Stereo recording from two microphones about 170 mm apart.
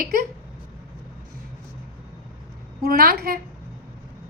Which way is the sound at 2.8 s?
60° right (ahead or behind).